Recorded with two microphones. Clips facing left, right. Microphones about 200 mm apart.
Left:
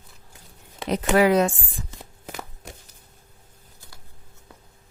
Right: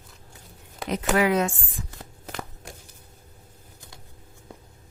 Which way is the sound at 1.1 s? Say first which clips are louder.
Left 4 dB; 35° left (ahead or behind).